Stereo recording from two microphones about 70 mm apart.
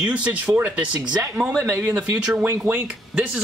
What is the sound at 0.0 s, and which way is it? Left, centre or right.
Speech, centre.